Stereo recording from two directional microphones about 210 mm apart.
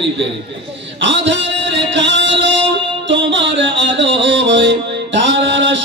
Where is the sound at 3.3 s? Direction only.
60° right (ahead or behind).